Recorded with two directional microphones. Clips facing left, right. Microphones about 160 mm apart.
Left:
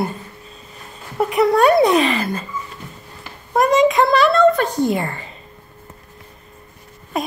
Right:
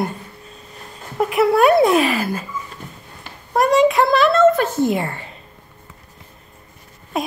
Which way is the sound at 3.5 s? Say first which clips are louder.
Even; centre (ahead or behind).